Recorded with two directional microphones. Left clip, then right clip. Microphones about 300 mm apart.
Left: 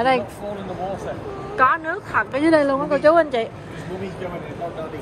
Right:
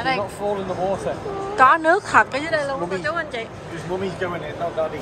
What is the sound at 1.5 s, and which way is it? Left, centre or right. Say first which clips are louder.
Speech: right 4 dB; centre.